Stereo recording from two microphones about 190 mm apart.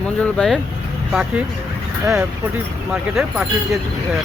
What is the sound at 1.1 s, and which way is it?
Speech, 5° right (ahead or behind).